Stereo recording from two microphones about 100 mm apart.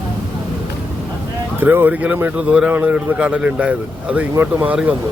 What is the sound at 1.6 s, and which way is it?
Speech, 20° right (ahead or behind).